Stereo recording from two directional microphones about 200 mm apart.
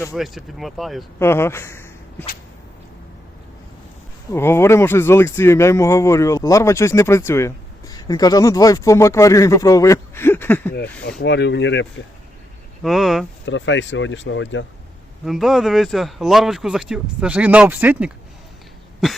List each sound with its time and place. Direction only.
0.1 s speech: centre (ahead or behind)
1.2 s speech: 10° left (ahead or behind)
4.3 s speech: 10° left (ahead or behind)
11.2 s speech: 60° left (ahead or behind)
12.8 s speech: centre (ahead or behind)
13.4 s speech: 65° left (ahead or behind)
15.2 s speech: centre (ahead or behind)